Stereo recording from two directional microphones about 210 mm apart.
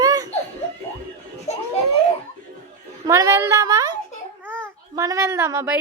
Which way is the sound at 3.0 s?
15° right (ahead or behind).